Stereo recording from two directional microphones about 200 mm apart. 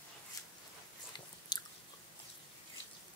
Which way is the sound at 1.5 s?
20° left (ahead or behind).